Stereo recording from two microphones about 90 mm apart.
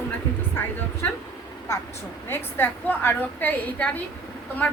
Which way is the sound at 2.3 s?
20° left (ahead or behind).